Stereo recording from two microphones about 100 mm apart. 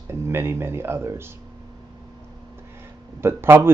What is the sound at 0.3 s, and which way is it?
Speech, 25° right (ahead or behind).